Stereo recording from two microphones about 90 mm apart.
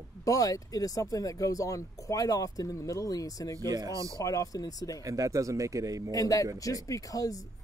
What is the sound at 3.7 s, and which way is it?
Speech, 40° right (ahead or behind).